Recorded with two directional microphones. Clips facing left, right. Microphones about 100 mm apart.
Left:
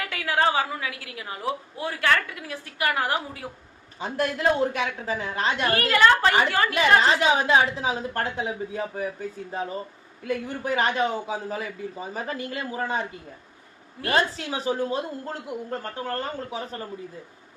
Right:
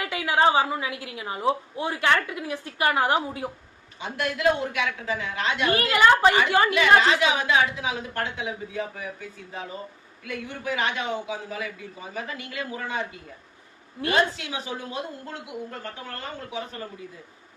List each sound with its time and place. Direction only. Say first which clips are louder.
0.0 s a woman's voice: right 2 dB; 20° right (ahead or behind)
4.0 s a man's voice: even; 35° left (ahead or behind)
5.9 s a woman's voice: right 1 dB; 15° right (ahead or behind)
6.7 s a man's voice: left 1 dB; 35° left (ahead or behind)
10.2 s a man's voice: left 4 dB; 40° left (ahead or behind)
14.3 s a man's voice: left 7 dB; 40° left (ahead or behind)